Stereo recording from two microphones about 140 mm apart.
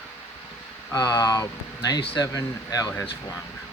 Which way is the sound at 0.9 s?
30° left (ahead or behind).